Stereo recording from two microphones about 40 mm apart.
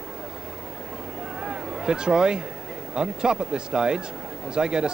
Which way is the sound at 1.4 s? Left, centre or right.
Centre.